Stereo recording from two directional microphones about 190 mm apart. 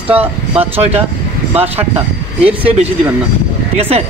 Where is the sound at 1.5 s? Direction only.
10° right (ahead or behind).